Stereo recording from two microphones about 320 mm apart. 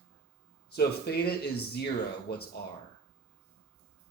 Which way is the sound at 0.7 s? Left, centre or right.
Left.